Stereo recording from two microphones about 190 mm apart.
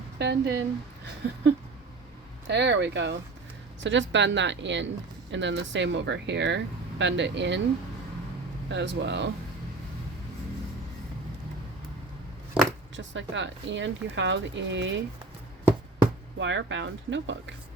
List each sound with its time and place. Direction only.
0.2 s speech: 65° right (ahead or behind)
2.5 s speech: 65° right (ahead or behind)
8.7 s speech: 70° right (ahead or behind)
12.6 s a sound: 5° right (ahead or behind)
13.0 s speech: 75° right (ahead or behind)
16.4 s speech: 75° right (ahead or behind)